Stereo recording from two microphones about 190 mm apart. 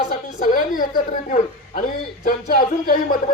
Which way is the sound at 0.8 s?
45° left (ahead or behind).